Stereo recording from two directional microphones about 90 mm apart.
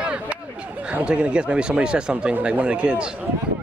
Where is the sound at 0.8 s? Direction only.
15° right (ahead or behind).